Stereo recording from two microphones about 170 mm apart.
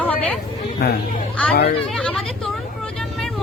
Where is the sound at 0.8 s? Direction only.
65° left (ahead or behind).